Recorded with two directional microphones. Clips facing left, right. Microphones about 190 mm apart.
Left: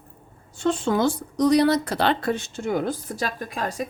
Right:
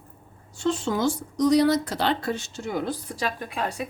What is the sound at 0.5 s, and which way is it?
Speech, 55° left (ahead or behind).